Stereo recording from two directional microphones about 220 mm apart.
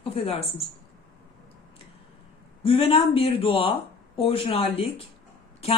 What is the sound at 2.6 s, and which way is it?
Speech, 25° left (ahead or behind).